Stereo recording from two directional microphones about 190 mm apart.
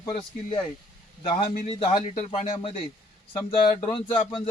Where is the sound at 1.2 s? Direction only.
30° left (ahead or behind).